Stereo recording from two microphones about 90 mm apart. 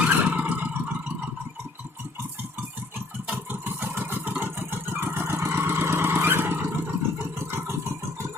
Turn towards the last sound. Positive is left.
turn(degrees=-25)  # may be behind; listen again after turning